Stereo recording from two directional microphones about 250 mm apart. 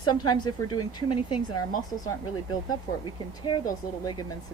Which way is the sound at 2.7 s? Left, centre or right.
Centre.